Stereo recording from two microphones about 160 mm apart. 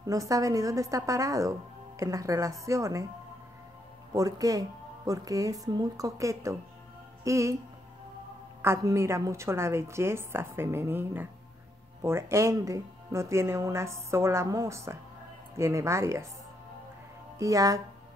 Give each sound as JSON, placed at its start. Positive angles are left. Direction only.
{"t": 0.0, "sound": "speech", "side_deg": -20}
{"t": 4.1, "sound": "speech", "side_deg": -20}
{"t": 8.6, "sound": "speech", "side_deg": -15}
{"t": 17.4, "sound": "speech", "side_deg": -20}